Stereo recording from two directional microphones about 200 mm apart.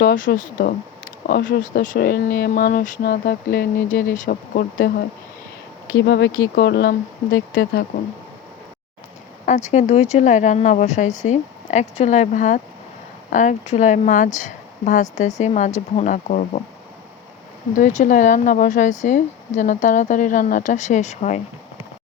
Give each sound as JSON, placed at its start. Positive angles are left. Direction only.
{"t": 0.0, "sound": "speech", "side_deg": 40}
{"t": 6.1, "sound": "speech", "side_deg": 60}
{"t": 9.7, "sound": "speech", "side_deg": 35}
{"t": 17.7, "sound": "speech", "side_deg": 35}